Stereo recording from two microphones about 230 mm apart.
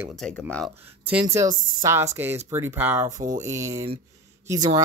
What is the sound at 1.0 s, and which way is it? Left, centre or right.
Speech, centre.